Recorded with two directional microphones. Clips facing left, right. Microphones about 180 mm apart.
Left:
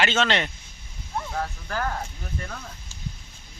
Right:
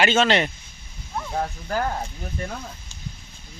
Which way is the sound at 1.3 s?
25° right (ahead or behind).